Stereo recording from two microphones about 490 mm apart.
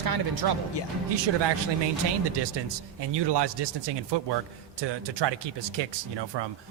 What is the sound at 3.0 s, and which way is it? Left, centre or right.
Speech, right.